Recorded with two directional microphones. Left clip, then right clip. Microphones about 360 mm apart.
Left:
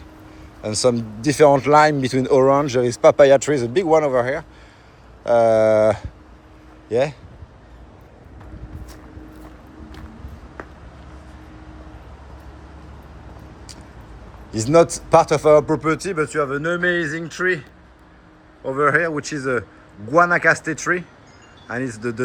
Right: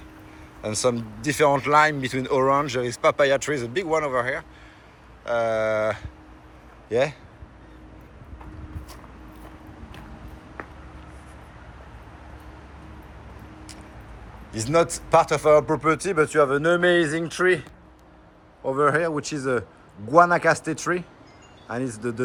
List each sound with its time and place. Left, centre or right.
0.6 s speech: centre
14.5 s speech: centre
18.6 s speech: centre